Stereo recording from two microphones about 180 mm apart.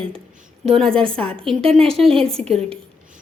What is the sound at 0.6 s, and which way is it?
Speech, centre (ahead or behind).